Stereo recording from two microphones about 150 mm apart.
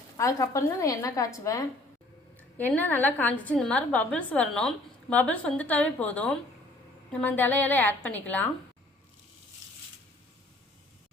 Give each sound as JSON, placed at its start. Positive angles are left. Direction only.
{"t": 0.2, "sound": "a woman's voice", "side_deg": 20}